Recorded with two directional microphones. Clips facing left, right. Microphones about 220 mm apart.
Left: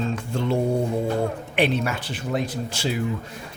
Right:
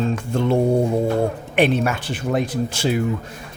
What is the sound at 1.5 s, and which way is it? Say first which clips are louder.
Speech: right 5 dB; 50° right (ahead or behind).